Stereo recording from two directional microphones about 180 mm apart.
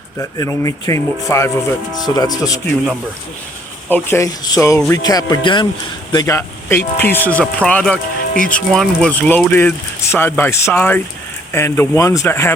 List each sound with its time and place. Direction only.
0.2 s speech: 15° left (ahead or behind)
3.8 s speech: 10° left (ahead or behind)